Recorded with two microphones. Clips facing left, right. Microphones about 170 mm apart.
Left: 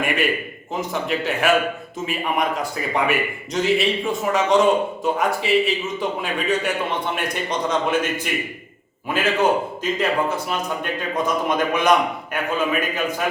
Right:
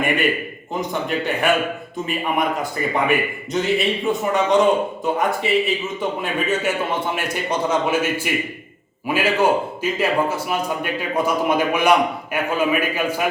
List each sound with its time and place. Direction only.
0.7 s a man's voice: centre (ahead or behind)